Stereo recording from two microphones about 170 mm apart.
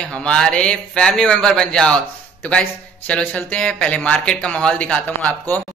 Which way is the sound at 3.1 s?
5° left (ahead or behind).